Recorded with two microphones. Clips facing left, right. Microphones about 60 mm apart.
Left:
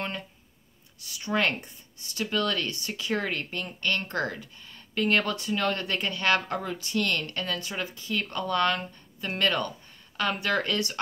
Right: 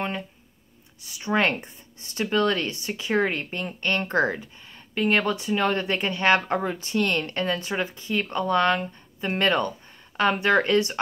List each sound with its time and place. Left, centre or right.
1.0 s speech: right